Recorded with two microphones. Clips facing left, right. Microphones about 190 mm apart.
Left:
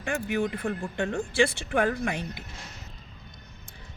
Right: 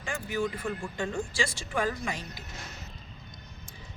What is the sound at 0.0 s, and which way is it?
A woman's voice, 60° left (ahead or behind).